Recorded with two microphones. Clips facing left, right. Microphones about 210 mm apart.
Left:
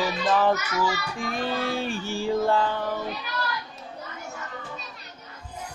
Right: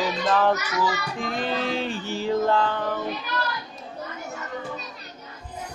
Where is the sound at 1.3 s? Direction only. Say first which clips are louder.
Right 1 dB; 20° right (ahead or behind).